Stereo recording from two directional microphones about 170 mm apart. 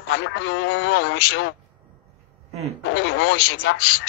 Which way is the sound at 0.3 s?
90° left.